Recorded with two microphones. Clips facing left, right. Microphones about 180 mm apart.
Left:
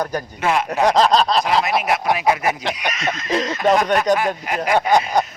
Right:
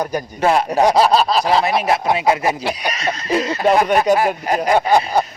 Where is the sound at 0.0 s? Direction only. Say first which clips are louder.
Right 2 dB; 10° right (ahead or behind).